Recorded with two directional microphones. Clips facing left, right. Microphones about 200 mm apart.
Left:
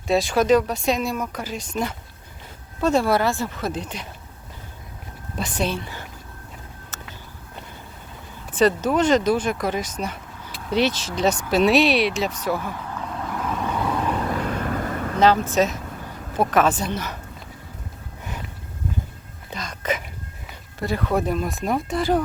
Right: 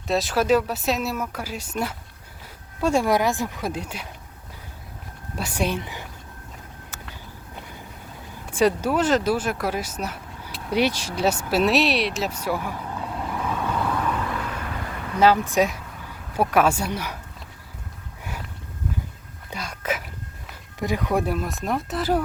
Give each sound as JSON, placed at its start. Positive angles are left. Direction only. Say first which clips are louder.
{"t": 0.1, "sound": "speech", "louder": "left 3 dB", "side_deg": 0}
{"t": 5.4, "sound": "speech", "louder": "even", "side_deg": -10}
{"t": 6.9, "sound": "a sound", "louder": "left 2 dB", "side_deg": -10}
{"t": 8.5, "sound": "speech", "louder": "left 2 dB", "side_deg": -10}
{"t": 14.1, "sound": "vehicle", "louder": "left 3 dB", "side_deg": 35}
{"t": 15.2, "sound": "speech", "louder": "even", "side_deg": -10}
{"t": 18.2, "sound": "a sound", "louder": "left 1 dB", "side_deg": -10}
{"t": 19.5, "sound": "a sound", "louder": "left 2 dB", "side_deg": -10}
{"t": 20.7, "sound": "speech", "louder": "even", "side_deg": -15}